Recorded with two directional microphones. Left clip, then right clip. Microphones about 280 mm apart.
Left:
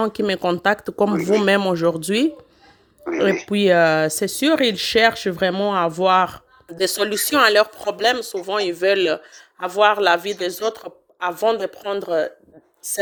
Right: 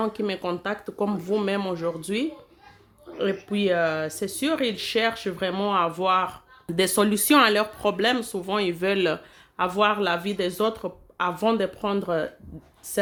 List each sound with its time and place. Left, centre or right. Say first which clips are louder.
0.0 s speech: left 7 dB; left